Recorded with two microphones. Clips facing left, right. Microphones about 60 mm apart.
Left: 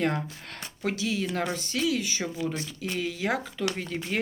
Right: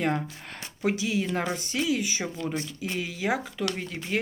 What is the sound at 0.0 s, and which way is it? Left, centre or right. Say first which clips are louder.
Speech: even; centre.